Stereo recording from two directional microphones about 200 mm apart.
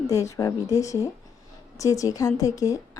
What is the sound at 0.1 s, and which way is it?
A woman's voice, 15° left (ahead or behind).